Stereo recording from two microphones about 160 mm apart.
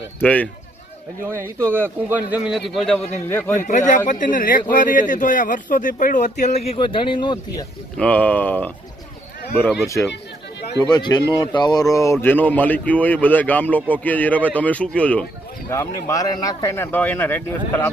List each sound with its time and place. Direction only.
0.2 s a man's voice: 10° left (ahead or behind)
1.3 s a man's voice: 15° right (ahead or behind); by 3.0 s centre (ahead or behind)
3.2 s a man's voice: 15° left (ahead or behind)
3.6 s speech: 50° left (ahead or behind); by 7.6 s 30° left (ahead or behind)
7.9 s a man's voice: 10° left (ahead or behind)
9.8 s a man's voice: 20° left (ahead or behind)